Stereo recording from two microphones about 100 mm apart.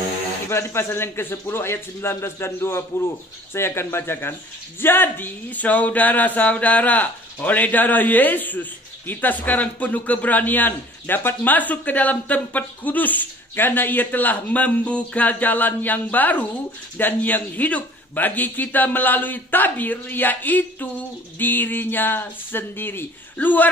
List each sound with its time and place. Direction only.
0.5 s speech: 25° left (ahead or behind)